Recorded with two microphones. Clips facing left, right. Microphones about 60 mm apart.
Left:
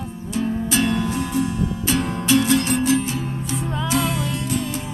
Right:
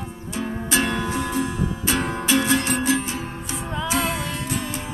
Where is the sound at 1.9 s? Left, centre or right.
Right.